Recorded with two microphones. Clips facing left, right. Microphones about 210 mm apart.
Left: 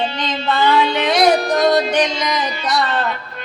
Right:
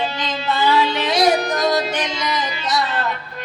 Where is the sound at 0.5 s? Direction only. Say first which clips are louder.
Left 2 dB; 5° right (ahead or behind).